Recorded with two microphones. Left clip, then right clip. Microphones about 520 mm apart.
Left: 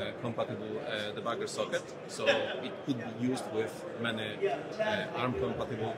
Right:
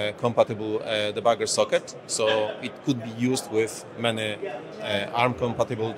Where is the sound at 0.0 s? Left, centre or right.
Right.